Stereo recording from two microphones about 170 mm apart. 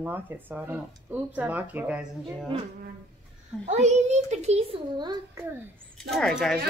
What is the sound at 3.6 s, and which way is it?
A child's voice, 45° right (ahead or behind).